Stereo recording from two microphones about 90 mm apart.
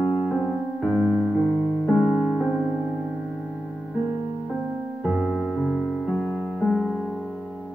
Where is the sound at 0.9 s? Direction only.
Centre (ahead or behind).